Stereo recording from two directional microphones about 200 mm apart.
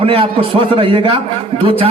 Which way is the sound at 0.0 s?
30° right (ahead or behind).